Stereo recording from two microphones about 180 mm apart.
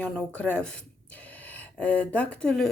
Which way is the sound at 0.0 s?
5° left (ahead or behind).